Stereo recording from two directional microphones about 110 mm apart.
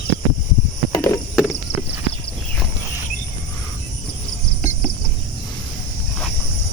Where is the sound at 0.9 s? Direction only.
20° left (ahead or behind).